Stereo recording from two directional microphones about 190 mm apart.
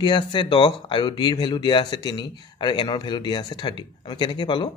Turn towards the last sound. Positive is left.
turn(degrees=25)  # may be behind; listen again after turning